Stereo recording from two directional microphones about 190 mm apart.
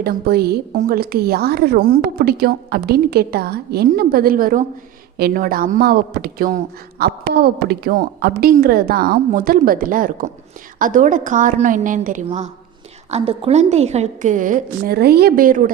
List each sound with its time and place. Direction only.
0.0 s a woman's voice: 55° right (ahead or behind)